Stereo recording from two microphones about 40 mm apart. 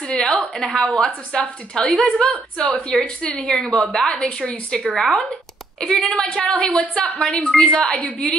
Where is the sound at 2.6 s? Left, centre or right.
Left.